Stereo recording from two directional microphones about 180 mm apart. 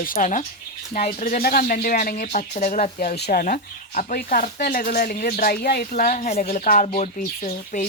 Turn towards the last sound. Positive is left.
turn(degrees=40)  # may be behind; listen again after turning